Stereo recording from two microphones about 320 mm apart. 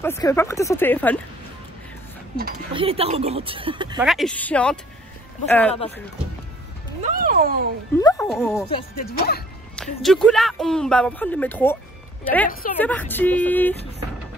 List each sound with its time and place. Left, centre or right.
0.0 s speech: centre
2.7 s speech: centre
4.0 s speech: centre
7.0 s speech: right
8.0 s speech: centre
8.9 s speech: left
9.8 s speech: centre